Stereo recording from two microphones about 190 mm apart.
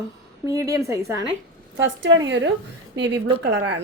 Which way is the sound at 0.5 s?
15° right (ahead or behind).